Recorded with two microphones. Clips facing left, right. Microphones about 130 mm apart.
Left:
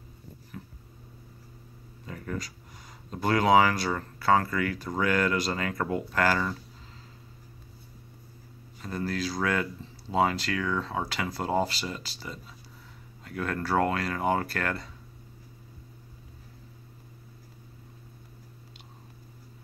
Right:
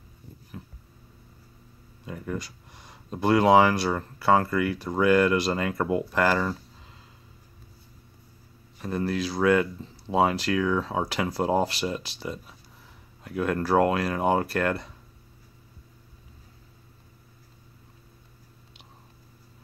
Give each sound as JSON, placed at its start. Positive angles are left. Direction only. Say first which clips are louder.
{"t": 2.0, "sound": "a sound", "louder": "right 3 dB", "side_deg": -5}
{"t": 3.1, "sound": "speech", "louder": "right 3 dB", "side_deg": -5}
{"t": 8.8, "sound": "speech", "louder": "right 4 dB", "side_deg": -20}
{"t": 11.5, "sound": "speech", "louder": "even", "side_deg": -10}